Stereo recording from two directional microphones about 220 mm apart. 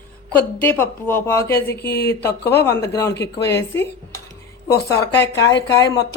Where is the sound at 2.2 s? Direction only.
50° left (ahead or behind).